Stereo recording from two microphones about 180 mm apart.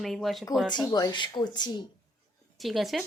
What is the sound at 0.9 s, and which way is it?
Speech, 20° left (ahead or behind).